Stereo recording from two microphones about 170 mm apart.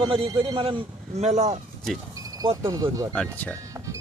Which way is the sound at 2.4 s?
30° right (ahead or behind).